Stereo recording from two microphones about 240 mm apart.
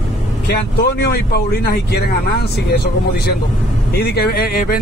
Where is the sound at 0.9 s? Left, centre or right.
Left.